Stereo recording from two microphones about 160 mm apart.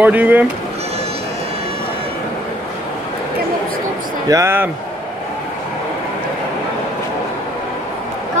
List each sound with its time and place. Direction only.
0.0 s speech: 10° right (ahead or behind)
4.3 s speech: 15° right (ahead or behind)